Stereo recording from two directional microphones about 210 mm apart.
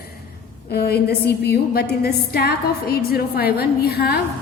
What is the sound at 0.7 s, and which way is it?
A woman's voice, 50° left (ahead or behind).